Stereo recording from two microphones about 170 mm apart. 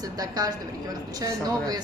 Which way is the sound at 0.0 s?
20° right (ahead or behind).